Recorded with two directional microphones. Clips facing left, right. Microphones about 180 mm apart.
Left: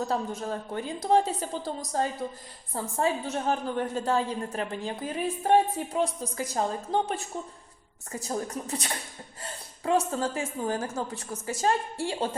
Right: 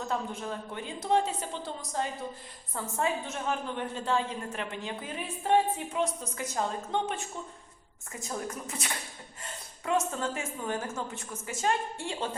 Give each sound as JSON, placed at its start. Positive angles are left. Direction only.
{"t": 0.0, "sound": "a woman's voice", "side_deg": 40}